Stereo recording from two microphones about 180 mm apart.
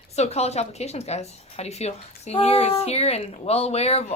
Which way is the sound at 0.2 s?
35° left (ahead or behind).